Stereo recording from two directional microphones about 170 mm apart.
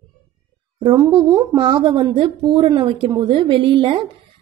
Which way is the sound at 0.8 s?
25° right (ahead or behind).